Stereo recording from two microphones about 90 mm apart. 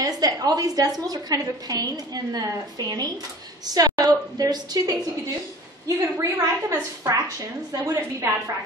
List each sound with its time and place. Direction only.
0.0 s a woman's voice: 45° right (ahead or behind)